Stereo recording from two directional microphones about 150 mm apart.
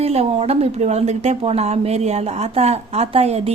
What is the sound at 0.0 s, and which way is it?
A woman's voice, 45° right (ahead or behind).